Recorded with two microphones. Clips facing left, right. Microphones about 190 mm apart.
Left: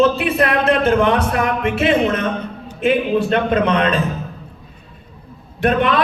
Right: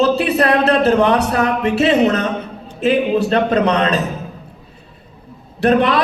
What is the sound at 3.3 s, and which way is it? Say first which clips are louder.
Speech: right 1 dB; 40° right (ahead or behind).